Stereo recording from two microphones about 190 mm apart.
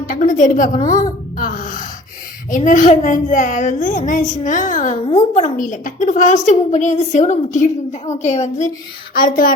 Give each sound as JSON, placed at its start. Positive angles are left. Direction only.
{"t": 0.1, "sound": "a woman's voice", "side_deg": 45}
{"t": 0.8, "sound": "speech", "side_deg": 20}
{"t": 1.4, "sound": "music", "side_deg": 45}
{"t": 2.5, "sound": "a woman's voice", "side_deg": 45}
{"t": 9.1, "sound": "a woman's voice", "side_deg": 50}